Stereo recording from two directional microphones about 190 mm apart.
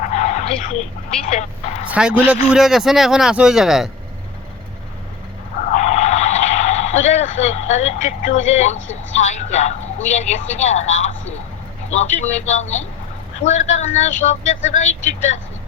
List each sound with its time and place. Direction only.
0.0 s vehicle: 40° left (ahead or behind)
1.3 s speech: 35° left (ahead or behind)
1.9 s a man's voice: 5° right (ahead or behind)
5.7 s vehicle: 40° left (ahead or behind)
9.1 s speech: 35° left (ahead or behind)